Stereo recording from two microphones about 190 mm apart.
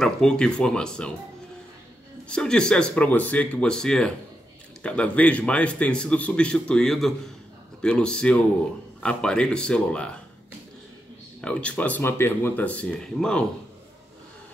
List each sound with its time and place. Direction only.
0.0 s a man's voice: 5° left (ahead or behind)
2.2 s a man's voice: 5° left (ahead or behind)
11.4 s speech: 5° left (ahead or behind)